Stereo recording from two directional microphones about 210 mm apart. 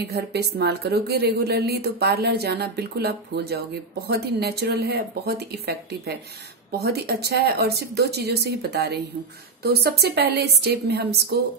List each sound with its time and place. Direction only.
0.1 s speech: 50° right (ahead or behind)